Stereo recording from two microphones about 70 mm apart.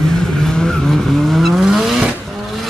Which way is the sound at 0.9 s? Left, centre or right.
Centre.